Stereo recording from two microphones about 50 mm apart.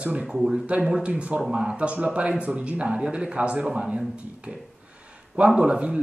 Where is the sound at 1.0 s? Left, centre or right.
Right.